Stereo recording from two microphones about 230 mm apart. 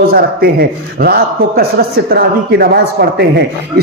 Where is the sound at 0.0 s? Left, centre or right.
Right.